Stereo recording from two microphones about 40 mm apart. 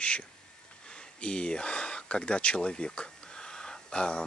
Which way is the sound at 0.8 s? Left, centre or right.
Left.